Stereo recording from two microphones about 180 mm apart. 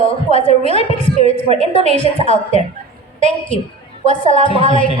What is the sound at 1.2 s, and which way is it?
Speech, 35° right (ahead or behind).